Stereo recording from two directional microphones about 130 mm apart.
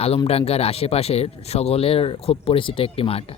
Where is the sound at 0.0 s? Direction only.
50° left (ahead or behind).